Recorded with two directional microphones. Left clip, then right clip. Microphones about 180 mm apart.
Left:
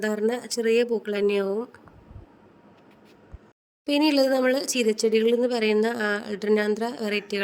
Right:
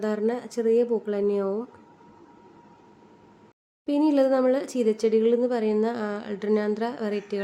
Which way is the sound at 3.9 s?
50° left (ahead or behind).